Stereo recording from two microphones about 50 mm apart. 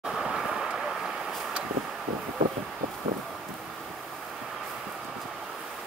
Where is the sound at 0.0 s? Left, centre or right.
Centre.